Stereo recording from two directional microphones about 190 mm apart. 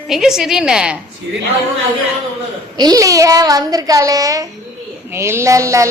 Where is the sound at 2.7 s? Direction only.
20° right (ahead or behind).